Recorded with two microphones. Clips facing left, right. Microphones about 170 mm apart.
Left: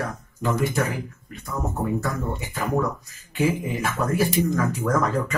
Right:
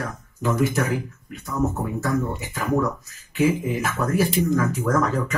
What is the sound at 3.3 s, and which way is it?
Speech, centre (ahead or behind).